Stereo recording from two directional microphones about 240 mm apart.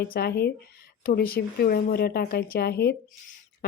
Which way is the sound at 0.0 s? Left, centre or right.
Left.